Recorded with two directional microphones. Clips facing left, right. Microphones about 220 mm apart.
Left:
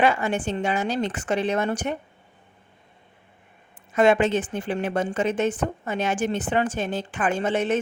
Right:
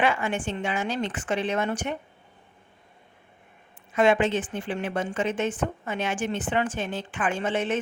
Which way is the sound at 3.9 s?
40° left (ahead or behind).